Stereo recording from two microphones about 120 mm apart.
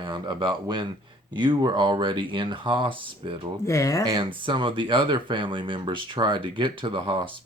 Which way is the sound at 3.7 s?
25° left (ahead or behind).